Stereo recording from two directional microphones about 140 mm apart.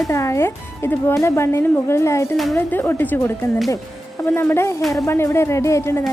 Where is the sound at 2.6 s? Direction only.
15° left (ahead or behind).